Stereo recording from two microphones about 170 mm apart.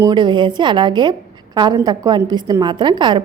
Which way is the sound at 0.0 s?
25° right (ahead or behind).